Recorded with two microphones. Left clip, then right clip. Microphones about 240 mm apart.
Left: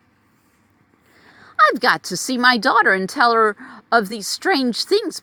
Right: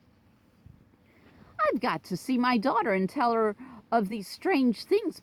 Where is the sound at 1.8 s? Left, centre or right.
Left.